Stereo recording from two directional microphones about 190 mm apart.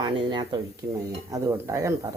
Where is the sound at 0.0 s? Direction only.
25° right (ahead or behind).